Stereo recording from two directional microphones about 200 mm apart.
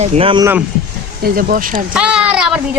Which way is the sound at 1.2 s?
45° right (ahead or behind).